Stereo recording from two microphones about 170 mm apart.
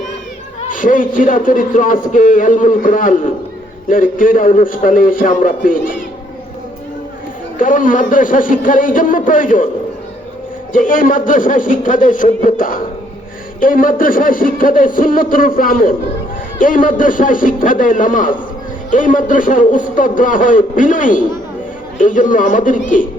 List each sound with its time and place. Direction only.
0.7 s speech: 50° left (ahead or behind)
7.6 s speech: 50° left (ahead or behind)
10.7 s a man's voice: 50° left (ahead or behind)